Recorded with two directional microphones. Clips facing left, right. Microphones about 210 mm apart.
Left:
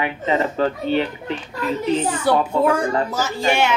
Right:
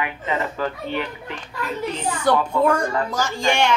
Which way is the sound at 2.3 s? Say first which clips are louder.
Even; 10° left (ahead or behind).